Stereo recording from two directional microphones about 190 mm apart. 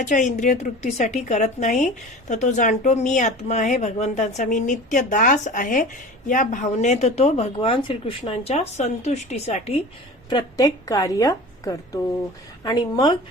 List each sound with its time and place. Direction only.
0.0 s speech: 40° left (ahead or behind)
10.2 s speech: 20° left (ahead or behind)